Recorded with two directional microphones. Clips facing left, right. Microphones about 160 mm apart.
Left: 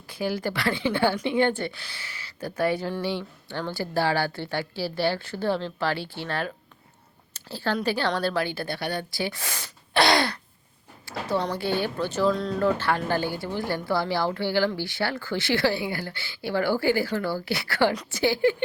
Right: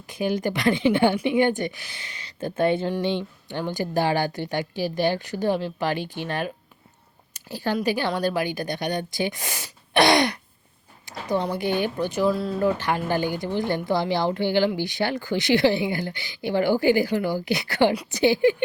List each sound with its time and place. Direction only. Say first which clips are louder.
0.1 s a woman's voice: right 3 dB; 20° right (ahead or behind)